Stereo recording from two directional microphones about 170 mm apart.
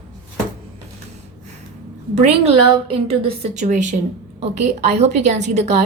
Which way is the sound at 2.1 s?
35° right (ahead or behind).